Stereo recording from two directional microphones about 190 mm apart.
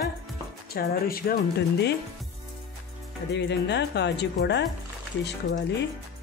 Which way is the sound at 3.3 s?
65° left (ahead or behind).